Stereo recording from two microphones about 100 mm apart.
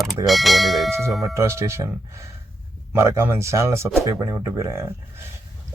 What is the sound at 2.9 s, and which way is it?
Speech, 25° right (ahead or behind).